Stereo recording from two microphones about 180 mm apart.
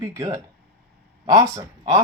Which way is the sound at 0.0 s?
15° right (ahead or behind).